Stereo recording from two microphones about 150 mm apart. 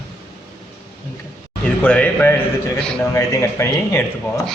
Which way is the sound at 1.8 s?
10° left (ahead or behind).